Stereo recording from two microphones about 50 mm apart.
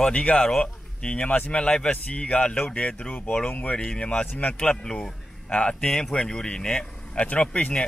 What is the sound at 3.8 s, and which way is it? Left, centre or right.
Speech, centre.